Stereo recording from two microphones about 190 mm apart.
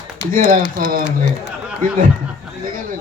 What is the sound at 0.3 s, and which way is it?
Speech, 45° right (ahead or behind).